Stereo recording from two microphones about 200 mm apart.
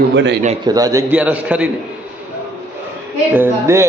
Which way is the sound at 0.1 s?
60° right (ahead or behind).